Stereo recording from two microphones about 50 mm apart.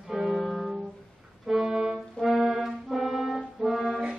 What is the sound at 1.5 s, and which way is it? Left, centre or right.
Music, centre.